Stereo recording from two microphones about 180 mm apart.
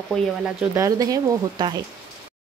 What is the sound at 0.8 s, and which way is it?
Speech, 20° right (ahead or behind).